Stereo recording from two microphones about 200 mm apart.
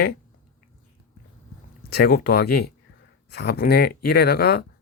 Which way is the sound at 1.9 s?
50° left (ahead or behind).